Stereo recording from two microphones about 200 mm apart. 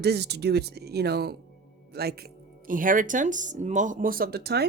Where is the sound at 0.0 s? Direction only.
55° right (ahead or behind).